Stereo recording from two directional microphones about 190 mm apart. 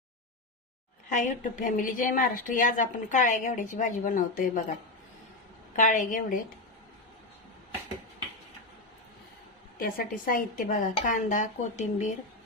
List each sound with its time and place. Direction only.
1.1 s speech: 40° left (ahead or behind)
5.7 s speech: 40° left (ahead or behind)
9.7 s speech: 50° left (ahead or behind)